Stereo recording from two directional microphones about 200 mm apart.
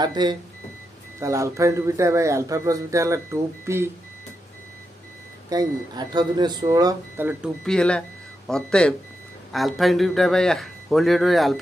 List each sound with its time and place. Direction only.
0.0 s speech: 20° right (ahead or behind)
5.5 s speech: 20° right (ahead or behind)
7.6 s a man's voice: 5° left (ahead or behind)